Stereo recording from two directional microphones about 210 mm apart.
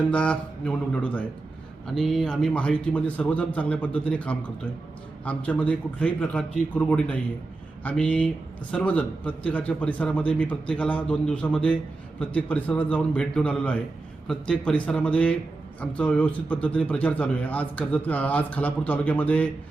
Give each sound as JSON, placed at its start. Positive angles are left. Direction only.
{"t": 0.1, "sound": "a man's voice", "side_deg": 5}